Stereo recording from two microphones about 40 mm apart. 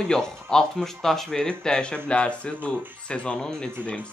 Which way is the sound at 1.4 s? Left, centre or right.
Left.